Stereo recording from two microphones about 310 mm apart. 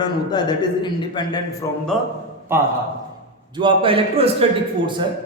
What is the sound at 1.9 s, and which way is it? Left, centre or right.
A man's voice, centre.